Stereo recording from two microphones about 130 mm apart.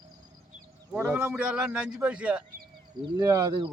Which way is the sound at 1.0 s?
15° right (ahead or behind).